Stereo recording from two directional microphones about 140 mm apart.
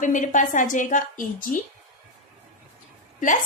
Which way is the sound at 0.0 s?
65° left (ahead or behind).